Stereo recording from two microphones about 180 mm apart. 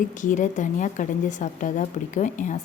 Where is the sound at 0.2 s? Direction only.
45° left (ahead or behind).